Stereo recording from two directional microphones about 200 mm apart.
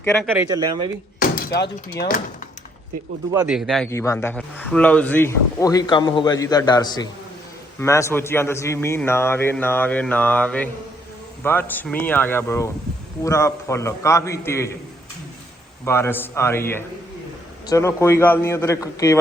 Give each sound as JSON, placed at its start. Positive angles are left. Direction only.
{"t": 0.0, "sound": "speech", "side_deg": 10}
{"t": 0.3, "sound": "speech", "side_deg": -10}
{"t": 0.5, "sound": "speech", "side_deg": -20}
{"t": 1.2, "sound": "speech", "side_deg": 50}
{"t": 3.4, "sound": "a man's voice", "side_deg": -5}
{"t": 3.8, "sound": "speech", "side_deg": 15}
{"t": 15.8, "sound": "speech", "side_deg": 10}